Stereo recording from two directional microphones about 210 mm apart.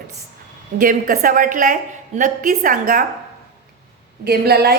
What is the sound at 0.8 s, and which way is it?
A woman's voice, 40° right (ahead or behind).